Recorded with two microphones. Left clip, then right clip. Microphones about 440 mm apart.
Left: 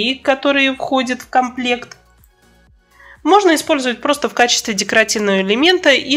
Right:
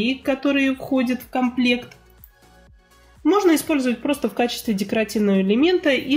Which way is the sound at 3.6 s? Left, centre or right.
Left.